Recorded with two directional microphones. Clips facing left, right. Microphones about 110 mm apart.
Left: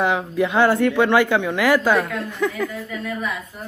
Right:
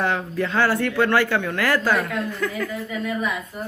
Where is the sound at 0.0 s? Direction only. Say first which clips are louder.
Left 3 dB; 10° left (ahead or behind).